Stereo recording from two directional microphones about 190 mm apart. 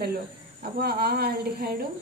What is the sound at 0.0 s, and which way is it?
A woman's voice, 50° right (ahead or behind).